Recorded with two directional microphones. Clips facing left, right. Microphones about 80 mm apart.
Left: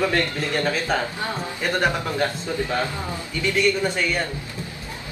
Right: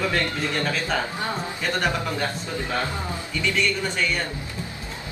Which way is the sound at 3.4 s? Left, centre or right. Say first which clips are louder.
Left 4 dB; left.